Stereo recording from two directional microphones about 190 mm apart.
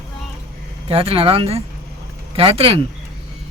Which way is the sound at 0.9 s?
30° right (ahead or behind).